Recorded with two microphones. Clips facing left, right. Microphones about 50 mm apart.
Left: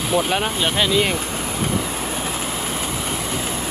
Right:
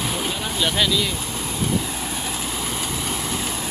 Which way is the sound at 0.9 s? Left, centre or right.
Left.